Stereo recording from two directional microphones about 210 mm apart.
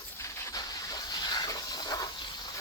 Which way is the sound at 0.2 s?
15° left (ahead or behind).